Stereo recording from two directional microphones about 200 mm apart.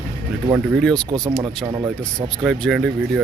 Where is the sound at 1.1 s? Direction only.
25° right (ahead or behind).